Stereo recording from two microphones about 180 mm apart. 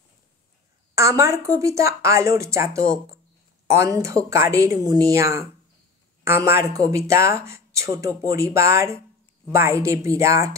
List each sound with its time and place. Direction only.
0.9 s speech: 15° right (ahead or behind)